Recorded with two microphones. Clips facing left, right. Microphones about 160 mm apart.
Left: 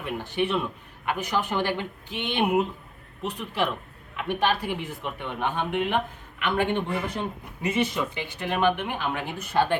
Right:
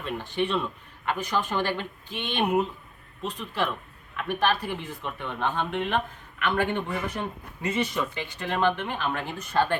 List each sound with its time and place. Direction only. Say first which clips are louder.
0.0 s speech: left 1 dB; 15° left (ahead or behind)